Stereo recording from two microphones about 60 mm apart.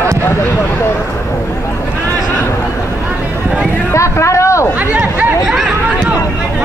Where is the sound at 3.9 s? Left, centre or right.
Left.